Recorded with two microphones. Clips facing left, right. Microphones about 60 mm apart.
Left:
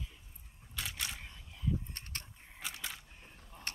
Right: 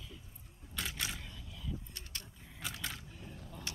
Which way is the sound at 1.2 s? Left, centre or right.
Left.